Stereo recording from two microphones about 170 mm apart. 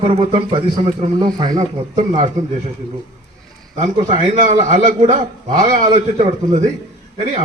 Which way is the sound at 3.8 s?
45° right (ahead or behind).